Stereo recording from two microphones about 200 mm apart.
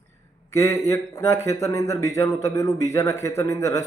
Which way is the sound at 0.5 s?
15° left (ahead or behind).